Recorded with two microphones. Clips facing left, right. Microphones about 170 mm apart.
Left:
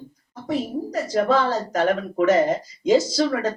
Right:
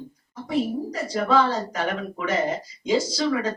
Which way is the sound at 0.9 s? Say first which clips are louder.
Left 2 dB; 45° left (ahead or behind).